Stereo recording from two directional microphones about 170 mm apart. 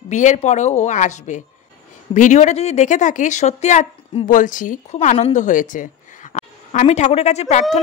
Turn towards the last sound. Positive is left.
turn(degrees=40)  # may be behind; listen again after turning